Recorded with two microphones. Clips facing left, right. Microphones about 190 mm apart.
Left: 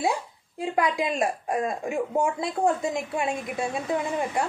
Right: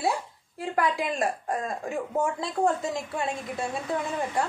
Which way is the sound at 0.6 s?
15° left (ahead or behind).